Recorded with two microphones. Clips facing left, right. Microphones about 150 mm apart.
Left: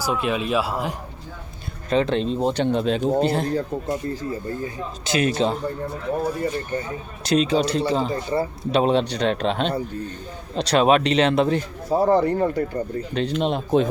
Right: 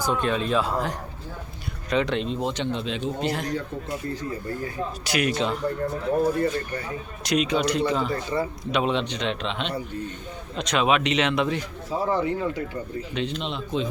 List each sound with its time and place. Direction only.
0.0 s speech: 10° left (ahead or behind)
1.9 s a man's voice: 30° left (ahead or behind)
6.4 s a man's voice: 25° left (ahead or behind); by 13.8 s 50° left (ahead or behind)